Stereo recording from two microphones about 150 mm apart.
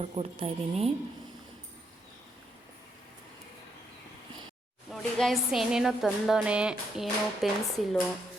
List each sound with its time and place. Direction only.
0.0 s speech: 40° right (ahead or behind)
4.9 s speech: centre (ahead or behind)